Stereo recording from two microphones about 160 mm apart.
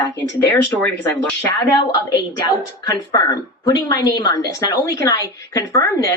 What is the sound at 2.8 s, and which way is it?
Speech, 20° left (ahead or behind).